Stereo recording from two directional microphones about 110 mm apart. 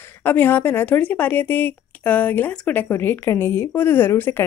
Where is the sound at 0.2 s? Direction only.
15° left (ahead or behind).